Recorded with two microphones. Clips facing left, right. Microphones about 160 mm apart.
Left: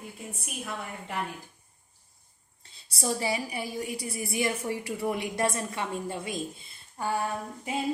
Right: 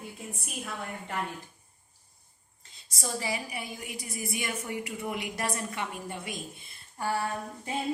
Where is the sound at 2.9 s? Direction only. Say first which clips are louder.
Left 4 dB; 30° left (ahead or behind).